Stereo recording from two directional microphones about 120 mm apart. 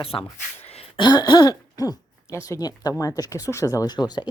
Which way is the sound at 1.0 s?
40° left (ahead or behind).